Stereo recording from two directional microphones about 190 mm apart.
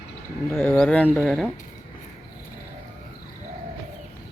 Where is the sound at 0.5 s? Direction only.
10° left (ahead or behind).